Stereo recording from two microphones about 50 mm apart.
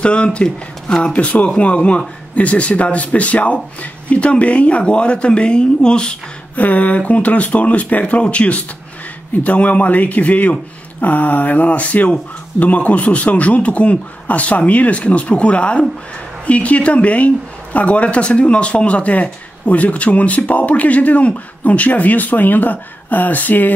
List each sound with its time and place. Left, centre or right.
0.0 s speech: left
6.5 s speech: left